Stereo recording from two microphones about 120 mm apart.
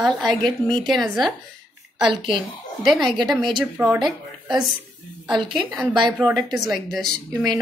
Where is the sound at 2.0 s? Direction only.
40° right (ahead or behind).